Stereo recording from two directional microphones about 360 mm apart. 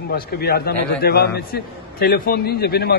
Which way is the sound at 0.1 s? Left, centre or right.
Left.